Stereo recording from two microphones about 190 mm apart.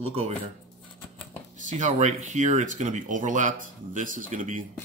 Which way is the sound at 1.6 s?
40° right (ahead or behind).